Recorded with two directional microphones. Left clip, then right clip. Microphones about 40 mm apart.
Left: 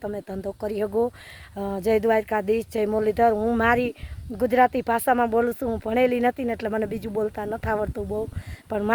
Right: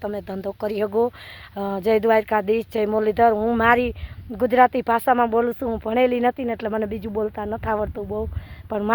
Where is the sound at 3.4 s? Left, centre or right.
Left.